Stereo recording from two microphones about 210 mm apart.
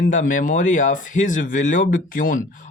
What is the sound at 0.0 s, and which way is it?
Speech, 35° left (ahead or behind).